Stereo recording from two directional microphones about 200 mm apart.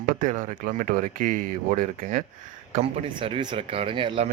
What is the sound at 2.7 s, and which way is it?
Speech, 30° right (ahead or behind).